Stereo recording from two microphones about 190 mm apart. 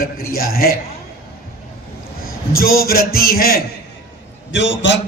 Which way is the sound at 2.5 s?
50° left (ahead or behind).